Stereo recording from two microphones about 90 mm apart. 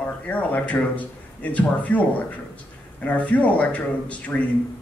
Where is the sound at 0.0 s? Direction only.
20° left (ahead or behind).